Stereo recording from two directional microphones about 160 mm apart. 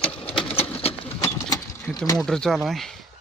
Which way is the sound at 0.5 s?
10° left (ahead or behind).